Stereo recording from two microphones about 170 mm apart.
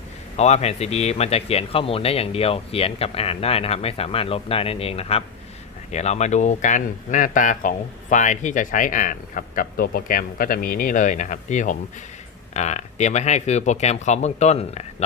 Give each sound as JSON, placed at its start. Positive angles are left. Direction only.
{"t": 0.3, "sound": "speech", "side_deg": 40}